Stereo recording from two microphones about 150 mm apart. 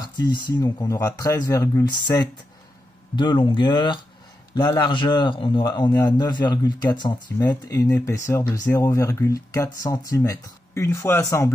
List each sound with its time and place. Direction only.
0.0 s speech: 30° left (ahead or behind)